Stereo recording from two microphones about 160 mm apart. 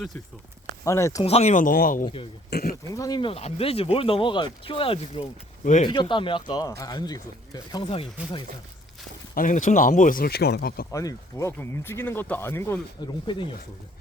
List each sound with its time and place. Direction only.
0.9 s a man's voice: 20° left (ahead or behind)
1.2 s speech: 40° left (ahead or behind); by 2.0 s 60° left (ahead or behind)
2.5 s speech: 70° left (ahead or behind)
2.9 s a man's voice: 25° left (ahead or behind)
9.3 s speech: 55° left (ahead or behind); by 10.8 s 70° left (ahead or behind)
10.9 s speech: 20° left (ahead or behind)
13.3 s a man's voice: 30° left (ahead or behind)